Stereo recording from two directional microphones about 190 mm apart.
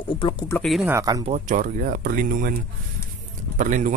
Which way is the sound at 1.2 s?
40° right (ahead or behind).